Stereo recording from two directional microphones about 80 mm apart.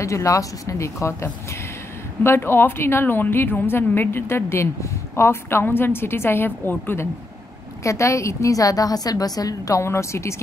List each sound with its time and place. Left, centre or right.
0.0 s a woman's voice: left
7.8 s a woman's voice: left